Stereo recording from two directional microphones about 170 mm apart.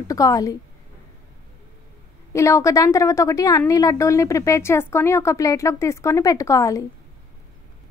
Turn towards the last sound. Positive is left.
turn(degrees=20)  # may be behind; listen again after turning